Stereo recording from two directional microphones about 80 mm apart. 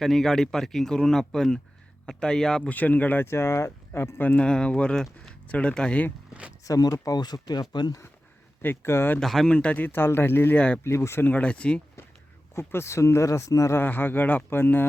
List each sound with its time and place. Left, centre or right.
0.0 s speech: centre
2.6 s speech: left
3.2 s speech: left
4.2 s speech: left
4.4 s speech: centre
6.7 s speech: left
8.6 s speech: left
9.2 s speech: centre
9.5 s speech: centre; by 11.3 s left
11.3 s speech: centre
12.5 s speech: left
13.8 s speech: left